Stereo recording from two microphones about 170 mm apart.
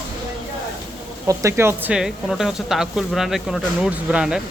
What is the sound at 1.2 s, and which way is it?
Speech, 20° right (ahead or behind).